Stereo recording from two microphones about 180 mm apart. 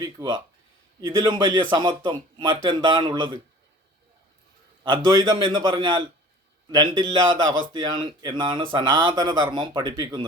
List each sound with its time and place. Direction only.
0.0 s a man's voice: 25° right (ahead or behind)
4.8 s a man's voice: 25° right (ahead or behind)